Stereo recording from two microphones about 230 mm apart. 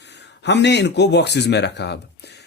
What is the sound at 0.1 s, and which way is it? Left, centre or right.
A man's voice, left.